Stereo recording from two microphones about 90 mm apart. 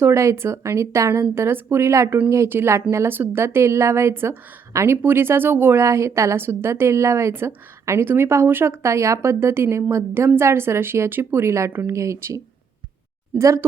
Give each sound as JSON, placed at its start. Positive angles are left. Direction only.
{"t": 0.0, "sound": "speech", "side_deg": -30}
{"t": 13.4, "sound": "speech", "side_deg": -35}